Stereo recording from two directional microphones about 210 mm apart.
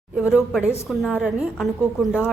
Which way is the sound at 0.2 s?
5° right (ahead or behind).